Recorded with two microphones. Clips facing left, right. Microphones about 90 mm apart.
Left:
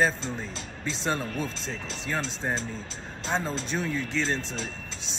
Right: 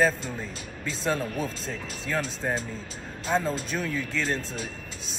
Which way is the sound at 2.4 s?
15° left (ahead or behind).